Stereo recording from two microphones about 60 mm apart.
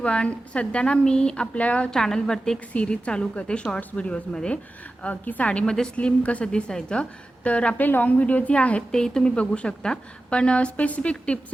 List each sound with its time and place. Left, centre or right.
0.0 s speech: centre
1.9 s a woman's voice: centre
5.0 s a woman's voice: left
7.8 s speech: left
8.9 s a woman's voice: centre